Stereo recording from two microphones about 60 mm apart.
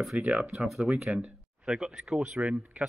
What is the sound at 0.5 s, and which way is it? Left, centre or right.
Speech, centre.